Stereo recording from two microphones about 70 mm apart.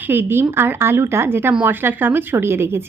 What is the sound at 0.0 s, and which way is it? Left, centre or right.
A woman's voice, right.